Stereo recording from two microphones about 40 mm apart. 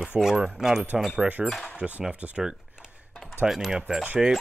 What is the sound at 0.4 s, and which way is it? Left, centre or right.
Speech, centre.